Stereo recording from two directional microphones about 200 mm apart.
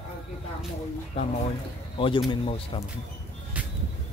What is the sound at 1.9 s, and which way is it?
Speech, 25° left (ahead or behind).